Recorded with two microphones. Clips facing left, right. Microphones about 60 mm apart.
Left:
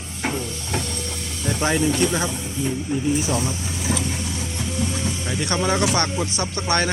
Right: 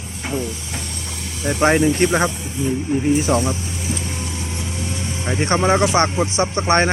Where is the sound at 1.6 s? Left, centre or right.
Right.